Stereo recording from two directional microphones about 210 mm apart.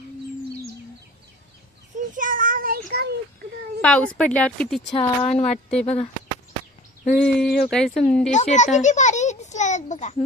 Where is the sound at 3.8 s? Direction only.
5° left (ahead or behind).